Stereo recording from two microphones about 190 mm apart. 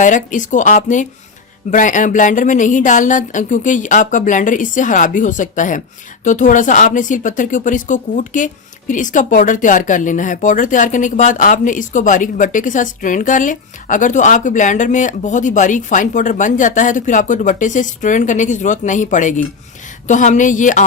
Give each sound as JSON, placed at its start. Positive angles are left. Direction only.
{"t": 0.0, "sound": "speech", "side_deg": 40}